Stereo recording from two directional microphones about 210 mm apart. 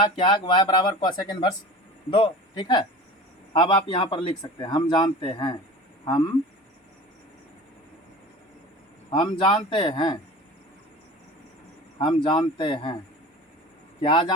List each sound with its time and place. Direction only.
0.0 s a man's voice: 20° left (ahead or behind)
9.3 s a man's voice: 25° left (ahead or behind)
11.9 s a man's voice: 25° left (ahead or behind)
14.0 s a man's voice: 20° left (ahead or behind)